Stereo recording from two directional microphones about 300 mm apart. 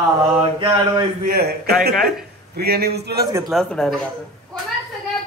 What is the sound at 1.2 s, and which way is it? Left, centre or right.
A man's voice, right.